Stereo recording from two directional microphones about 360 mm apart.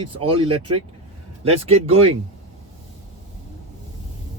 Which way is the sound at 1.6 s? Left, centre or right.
Centre.